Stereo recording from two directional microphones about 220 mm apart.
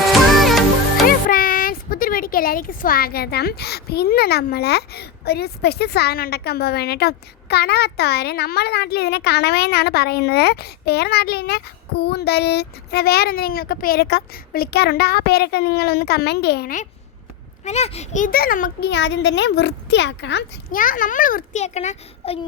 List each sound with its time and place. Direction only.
0.3 s music: centre (ahead or behind)
1.0 s speech: 40° left (ahead or behind)
17.7 s speech: 30° left (ahead or behind); by 20.4 s 55° left (ahead or behind)
20.7 s a child's voice: 40° left (ahead or behind)